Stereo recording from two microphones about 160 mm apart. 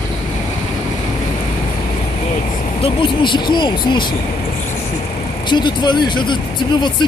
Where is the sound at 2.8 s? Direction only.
30° left (ahead or behind).